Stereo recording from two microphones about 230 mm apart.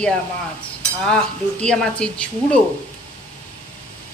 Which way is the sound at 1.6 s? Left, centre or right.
Centre.